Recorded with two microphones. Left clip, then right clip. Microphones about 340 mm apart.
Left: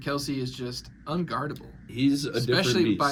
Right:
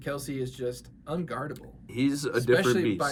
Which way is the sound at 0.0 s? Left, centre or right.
Centre.